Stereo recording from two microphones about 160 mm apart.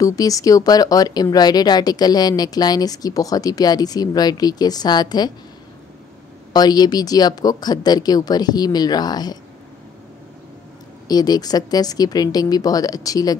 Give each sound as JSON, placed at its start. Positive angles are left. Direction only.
{"t": 0.0, "sound": "speech", "side_deg": 20}
{"t": 6.5, "sound": "speech", "side_deg": 25}
{"t": 11.1, "sound": "speech", "side_deg": 25}